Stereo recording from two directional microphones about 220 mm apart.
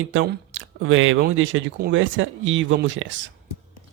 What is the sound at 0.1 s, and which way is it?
Speech, 60° right (ahead or behind).